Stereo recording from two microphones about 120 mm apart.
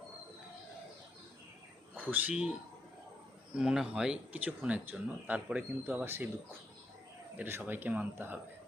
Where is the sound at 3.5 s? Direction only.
5° right (ahead or behind).